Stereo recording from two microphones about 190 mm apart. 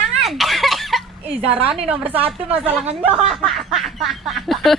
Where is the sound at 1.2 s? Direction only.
30° right (ahead or behind).